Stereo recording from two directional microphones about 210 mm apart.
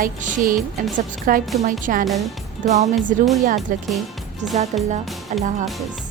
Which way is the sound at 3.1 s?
40° right (ahead or behind).